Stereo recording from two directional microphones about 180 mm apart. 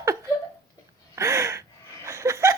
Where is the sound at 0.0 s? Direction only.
15° right (ahead or behind).